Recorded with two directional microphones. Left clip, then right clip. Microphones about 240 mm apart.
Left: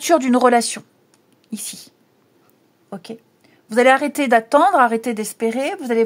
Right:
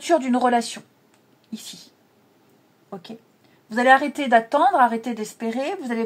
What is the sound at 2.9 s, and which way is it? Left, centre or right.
A woman's voice, left.